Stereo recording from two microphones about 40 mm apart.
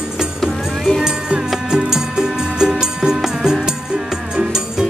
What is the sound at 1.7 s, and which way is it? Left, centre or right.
Music, centre.